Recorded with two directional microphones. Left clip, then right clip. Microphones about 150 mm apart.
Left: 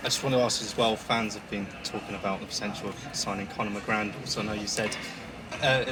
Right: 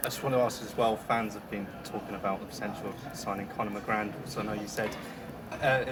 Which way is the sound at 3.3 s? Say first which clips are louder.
Right 1 dB; 40° left (ahead or behind).